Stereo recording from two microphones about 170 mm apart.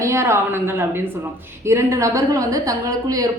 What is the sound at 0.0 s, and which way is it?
A woman's voice, 15° right (ahead or behind).